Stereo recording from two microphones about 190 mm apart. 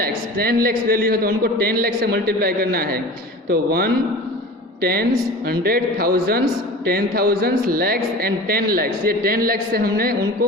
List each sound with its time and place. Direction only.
0.0 s a man's voice: 50° right (ahead or behind)